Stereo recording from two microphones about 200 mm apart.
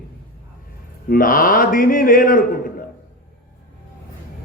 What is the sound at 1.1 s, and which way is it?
A man's voice, 45° left (ahead or behind).